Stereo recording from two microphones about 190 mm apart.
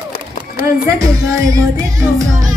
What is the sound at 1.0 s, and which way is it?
Music, 15° right (ahead or behind).